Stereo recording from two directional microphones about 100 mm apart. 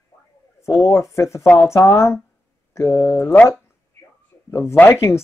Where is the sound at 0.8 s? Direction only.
30° left (ahead or behind).